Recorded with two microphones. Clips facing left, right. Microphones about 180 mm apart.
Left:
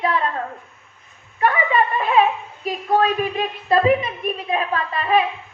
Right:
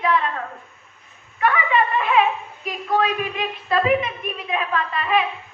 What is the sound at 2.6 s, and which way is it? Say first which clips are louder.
A woman's voice: left 3 dB; 40° left (ahead or behind).